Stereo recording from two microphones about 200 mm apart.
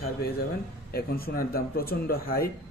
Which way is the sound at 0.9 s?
50° left (ahead or behind).